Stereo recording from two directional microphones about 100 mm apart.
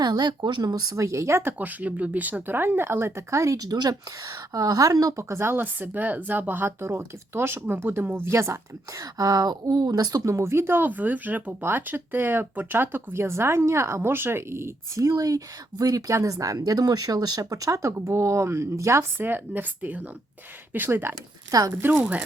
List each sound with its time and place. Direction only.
0.0 s speech: 45° right (ahead or behind); by 21.9 s 20° right (ahead or behind)